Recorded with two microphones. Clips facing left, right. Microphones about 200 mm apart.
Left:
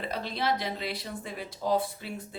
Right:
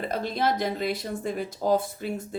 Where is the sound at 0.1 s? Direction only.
45° right (ahead or behind).